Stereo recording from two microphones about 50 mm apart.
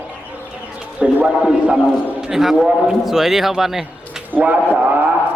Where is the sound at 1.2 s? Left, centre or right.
Centre.